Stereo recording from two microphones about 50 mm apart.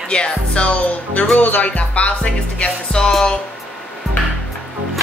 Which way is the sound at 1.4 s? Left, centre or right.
Left.